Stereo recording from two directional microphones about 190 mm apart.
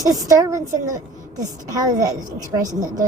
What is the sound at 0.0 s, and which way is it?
A woman's voice, 15° right (ahead or behind).